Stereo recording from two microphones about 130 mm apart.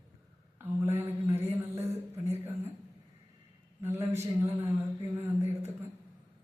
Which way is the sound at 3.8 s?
20° right (ahead or behind).